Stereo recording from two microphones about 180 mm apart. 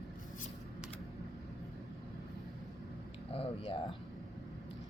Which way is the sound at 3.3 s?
30° left (ahead or behind).